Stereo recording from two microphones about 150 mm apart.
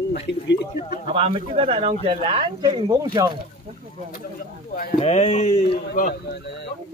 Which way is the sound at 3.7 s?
45° right (ahead or behind).